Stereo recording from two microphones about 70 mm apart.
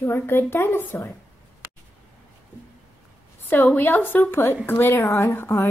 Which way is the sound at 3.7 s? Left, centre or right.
Left.